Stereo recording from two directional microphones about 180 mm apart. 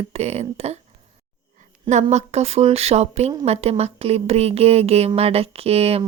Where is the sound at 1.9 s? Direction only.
40° right (ahead or behind).